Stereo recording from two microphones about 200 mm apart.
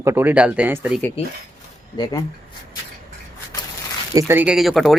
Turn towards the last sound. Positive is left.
turn(degrees=0)  # may be behind; listen again after turning